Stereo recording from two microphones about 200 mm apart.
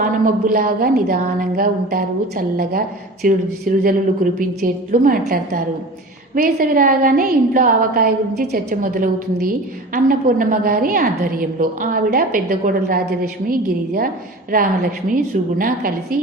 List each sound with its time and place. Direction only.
0.0 s a woman's voice: 45° right (ahead or behind)
3.2 s a woman's voice: 40° right (ahead or behind)
15.1 s a woman's voice: 45° right (ahead or behind)